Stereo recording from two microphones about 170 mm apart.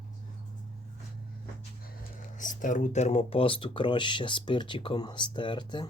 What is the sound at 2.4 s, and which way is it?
Speech, 50° left (ahead or behind).